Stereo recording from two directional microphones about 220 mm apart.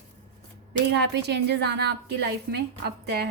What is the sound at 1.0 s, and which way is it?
A woman's voice, 50° right (ahead or behind).